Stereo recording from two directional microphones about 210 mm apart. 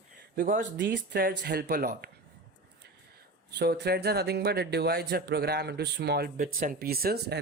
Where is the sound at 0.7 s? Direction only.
55° right (ahead or behind).